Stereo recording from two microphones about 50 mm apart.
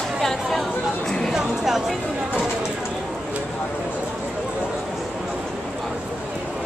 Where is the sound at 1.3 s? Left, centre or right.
Centre.